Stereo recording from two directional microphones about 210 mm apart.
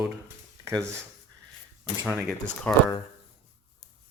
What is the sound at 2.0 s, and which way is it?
Speech, centre (ahead or behind).